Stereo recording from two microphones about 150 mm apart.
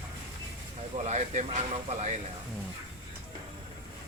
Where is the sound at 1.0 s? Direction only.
50° right (ahead or behind).